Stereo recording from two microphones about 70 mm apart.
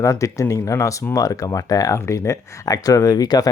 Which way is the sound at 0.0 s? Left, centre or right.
Left.